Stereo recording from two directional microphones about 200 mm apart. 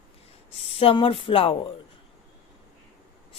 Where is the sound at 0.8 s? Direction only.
25° left (ahead or behind).